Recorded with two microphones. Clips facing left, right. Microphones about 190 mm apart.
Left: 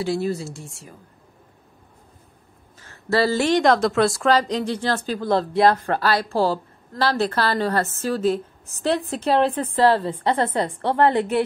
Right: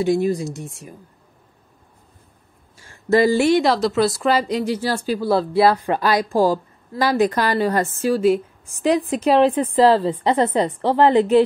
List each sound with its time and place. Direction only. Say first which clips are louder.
0.0 s a woman's voice: right 5 dB; 15° right (ahead or behind)
2.8 s a woman's voice: right 5 dB; 15° right (ahead or behind)
5.8 s a woman's voice: right 2 dB; 15° right (ahead or behind)